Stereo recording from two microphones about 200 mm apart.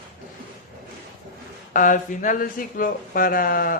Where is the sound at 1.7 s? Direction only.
40° left (ahead or behind).